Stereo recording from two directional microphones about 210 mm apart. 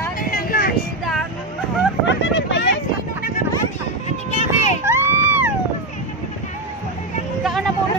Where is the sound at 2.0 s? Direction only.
60° left (ahead or behind).